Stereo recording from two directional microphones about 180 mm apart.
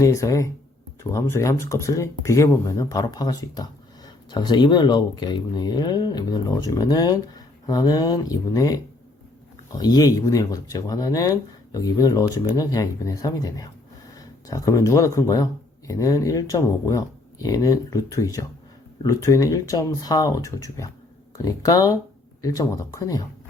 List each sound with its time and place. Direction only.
0.0 s speech: 15° left (ahead or behind)